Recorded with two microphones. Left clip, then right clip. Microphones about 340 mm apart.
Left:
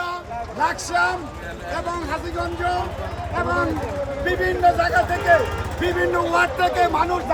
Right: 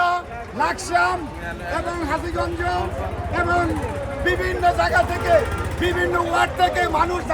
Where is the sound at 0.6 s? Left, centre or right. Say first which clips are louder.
Right 1 dB; right.